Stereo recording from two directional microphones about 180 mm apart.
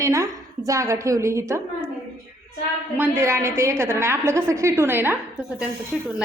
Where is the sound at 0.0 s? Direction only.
15° right (ahead or behind).